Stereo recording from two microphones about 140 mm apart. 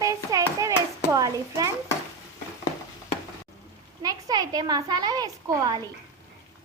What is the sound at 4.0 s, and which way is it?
A woman's voice, 25° right (ahead or behind).